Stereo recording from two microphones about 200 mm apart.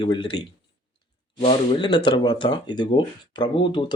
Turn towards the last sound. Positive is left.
turn(degrees=25)  # may be behind; listen again after turning